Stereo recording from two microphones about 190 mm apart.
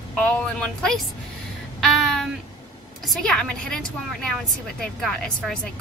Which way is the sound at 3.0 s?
Centre (ahead or behind).